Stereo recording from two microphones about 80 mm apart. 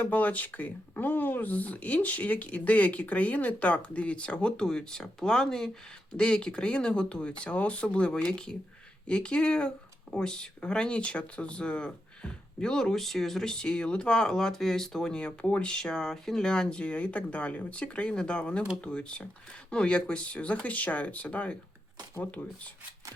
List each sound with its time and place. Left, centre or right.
0.0 s speech: centre